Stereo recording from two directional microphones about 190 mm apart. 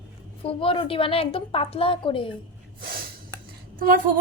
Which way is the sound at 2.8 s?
50° right (ahead or behind).